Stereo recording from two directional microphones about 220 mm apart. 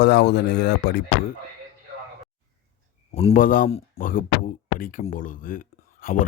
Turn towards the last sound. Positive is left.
turn(degrees=40)  # may be behind; listen again after turning